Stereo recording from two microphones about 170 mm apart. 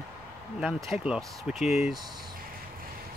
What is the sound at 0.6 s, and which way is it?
Speech, centre (ahead or behind).